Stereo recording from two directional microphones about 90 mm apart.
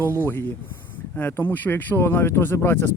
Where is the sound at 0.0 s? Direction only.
25° left (ahead or behind).